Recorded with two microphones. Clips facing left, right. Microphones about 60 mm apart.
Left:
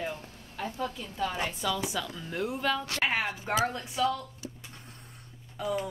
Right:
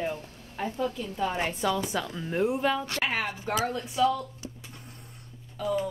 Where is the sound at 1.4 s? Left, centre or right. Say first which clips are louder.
Right 3 dB; right.